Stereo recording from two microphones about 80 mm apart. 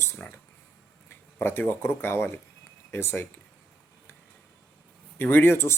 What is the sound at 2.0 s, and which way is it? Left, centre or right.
Speech, left.